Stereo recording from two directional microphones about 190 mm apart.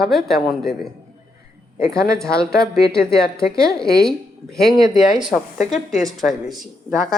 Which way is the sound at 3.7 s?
Centre (ahead or behind).